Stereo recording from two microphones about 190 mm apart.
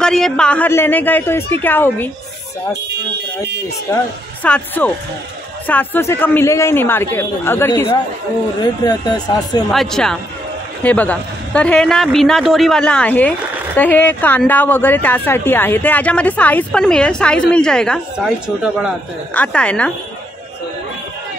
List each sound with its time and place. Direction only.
0.0 s speech: 5° left (ahead or behind)
3.9 s speech: 10° left (ahead or behind)
9.7 s a man's voice: centre (ahead or behind)
19.3 s speech: 5° left (ahead or behind)